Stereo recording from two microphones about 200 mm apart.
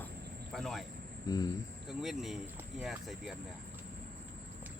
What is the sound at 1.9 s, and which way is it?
Speech, centre (ahead or behind).